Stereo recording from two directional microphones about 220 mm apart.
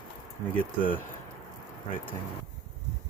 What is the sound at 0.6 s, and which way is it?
Speech, 40° left (ahead or behind).